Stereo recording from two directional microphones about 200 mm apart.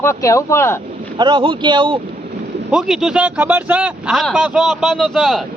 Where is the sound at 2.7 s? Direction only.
5° right (ahead or behind).